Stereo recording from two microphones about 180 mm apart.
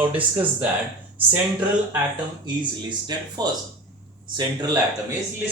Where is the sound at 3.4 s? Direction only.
20° right (ahead or behind).